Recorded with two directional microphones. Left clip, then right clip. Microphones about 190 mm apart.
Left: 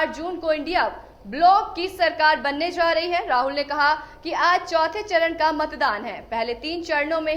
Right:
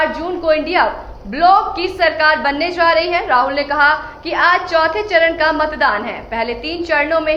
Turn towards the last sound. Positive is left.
turn(degrees=45)  # may be behind; listen again after turning